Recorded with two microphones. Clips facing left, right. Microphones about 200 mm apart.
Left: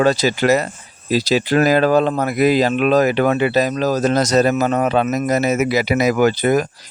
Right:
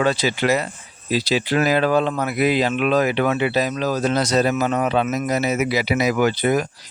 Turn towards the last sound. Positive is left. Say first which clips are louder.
# left 3 dB
turn(degrees=45)  # may be behind; listen again after turning